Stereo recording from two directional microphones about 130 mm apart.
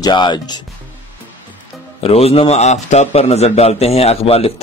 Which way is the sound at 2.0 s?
50° left (ahead or behind).